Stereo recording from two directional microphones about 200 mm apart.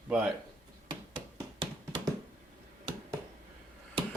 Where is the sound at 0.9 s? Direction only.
25° right (ahead or behind).